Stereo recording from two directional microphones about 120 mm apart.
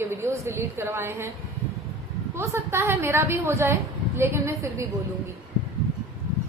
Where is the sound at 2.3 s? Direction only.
20° right (ahead or behind).